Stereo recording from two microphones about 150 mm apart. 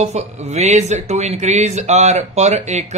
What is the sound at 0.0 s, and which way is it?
Speech, 45° right (ahead or behind).